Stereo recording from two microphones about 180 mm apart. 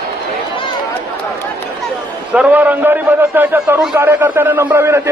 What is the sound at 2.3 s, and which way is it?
A man's voice, 10° right (ahead or behind).